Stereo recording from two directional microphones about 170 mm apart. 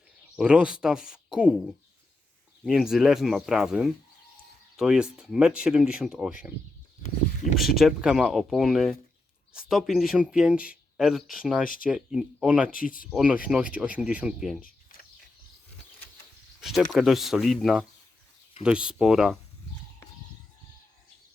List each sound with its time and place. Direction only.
0.3 s speech: 5° right (ahead or behind)
7.5 s speech: centre (ahead or behind)
11.6 s speech: 55° left (ahead or behind)
11.9 s speech: 5° right (ahead or behind)
12.7 s speech: 55° left (ahead or behind)
13.1 s speech: 5° right (ahead or behind)
14.9 s a sound: 55° left (ahead or behind)
16.6 s speech: centre (ahead or behind)